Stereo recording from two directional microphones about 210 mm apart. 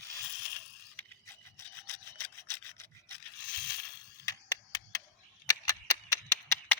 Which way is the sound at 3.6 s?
20° left (ahead or behind).